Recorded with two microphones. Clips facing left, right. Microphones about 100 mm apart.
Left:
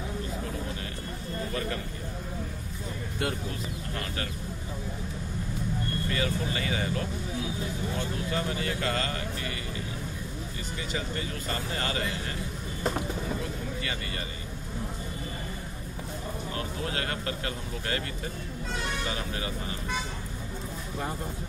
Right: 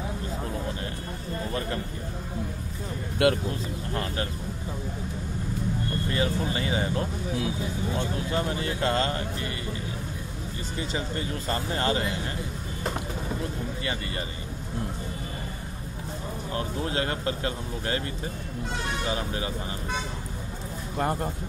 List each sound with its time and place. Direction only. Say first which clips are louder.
3.2 s speech: right 10 dB; 80° right
3.9 s speech: right 6 dB; 30° right (ahead or behind)
6.0 s speech: right 3 dB; 30° right (ahead or behind)
8.3 s speech: right 1 dB; 30° right (ahead or behind)
10.8 s speech: right 3 dB; 30° right (ahead or behind)
16.5 s speech: right 6 dB; 25° right (ahead or behind)
19.0 s speech: right 4 dB; 25° right (ahead or behind)
21.0 s speech: right 8 dB; 60° right (ahead or behind)